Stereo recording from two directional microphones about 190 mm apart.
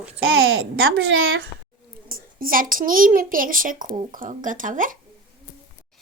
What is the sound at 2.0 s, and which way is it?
A child's voice, 50° right (ahead or behind).